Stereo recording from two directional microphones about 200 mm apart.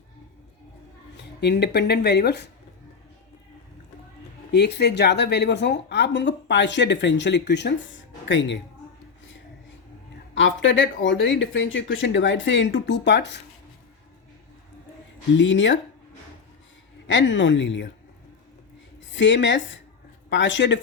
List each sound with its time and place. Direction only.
1.1 s speech: 60° left (ahead or behind)
4.5 s a woman's voice: 55° left (ahead or behind)
10.3 s speech: 65° left (ahead or behind)
15.4 s speech: 65° left (ahead or behind)
17.1 s speech: 65° left (ahead or behind)
19.1 s a woman's voice: 65° left (ahead or behind)